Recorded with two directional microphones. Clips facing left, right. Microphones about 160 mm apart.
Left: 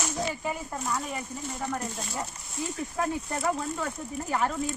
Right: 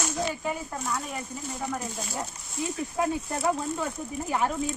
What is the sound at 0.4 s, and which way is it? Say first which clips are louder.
Speech: right 1 dB; centre (ahead or behind).